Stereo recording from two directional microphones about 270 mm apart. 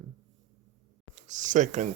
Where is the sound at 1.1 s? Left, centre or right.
Right.